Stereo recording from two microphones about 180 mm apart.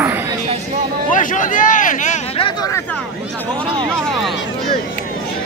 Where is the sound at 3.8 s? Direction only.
5° left (ahead or behind).